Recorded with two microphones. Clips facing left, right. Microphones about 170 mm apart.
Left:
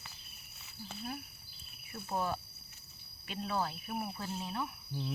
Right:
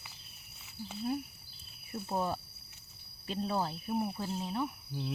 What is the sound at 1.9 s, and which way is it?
Speech, 25° right (ahead or behind).